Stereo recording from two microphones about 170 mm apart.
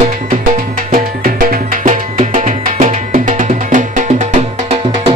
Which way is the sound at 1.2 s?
55° right (ahead or behind).